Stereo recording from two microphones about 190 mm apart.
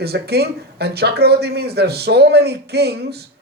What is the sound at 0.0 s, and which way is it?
Speech, 55° right (ahead or behind).